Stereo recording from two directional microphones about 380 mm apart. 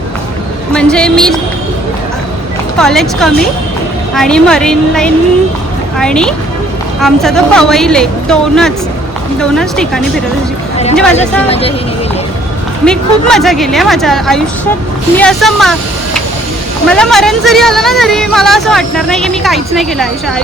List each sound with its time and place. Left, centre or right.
0.7 s speech: centre
2.7 s speech: centre
11.1 s speech: centre
12.8 s speech: centre
16.8 s speech: centre